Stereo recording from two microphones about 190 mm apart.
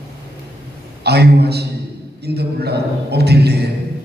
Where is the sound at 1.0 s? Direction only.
60° right (ahead or behind).